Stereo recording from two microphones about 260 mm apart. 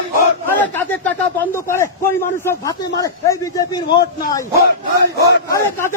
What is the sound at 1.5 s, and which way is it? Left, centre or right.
A man's voice, centre.